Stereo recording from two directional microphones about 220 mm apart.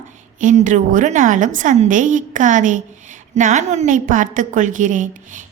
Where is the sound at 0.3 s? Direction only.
35° right (ahead or behind).